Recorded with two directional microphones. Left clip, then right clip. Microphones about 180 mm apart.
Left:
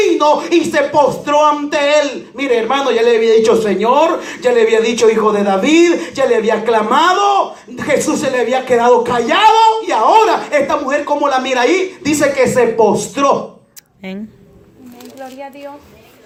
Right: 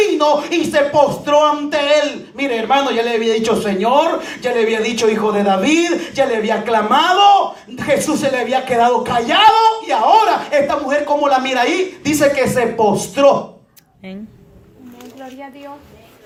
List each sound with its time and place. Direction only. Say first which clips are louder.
0.2 s speech: left 3 dB; 35° right (ahead or behind)